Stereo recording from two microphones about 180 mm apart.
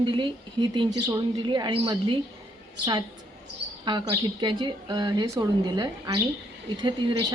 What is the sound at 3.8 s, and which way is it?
Speech, 25° right (ahead or behind).